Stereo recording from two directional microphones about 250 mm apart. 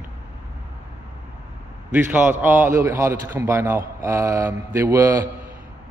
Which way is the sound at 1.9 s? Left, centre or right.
Centre.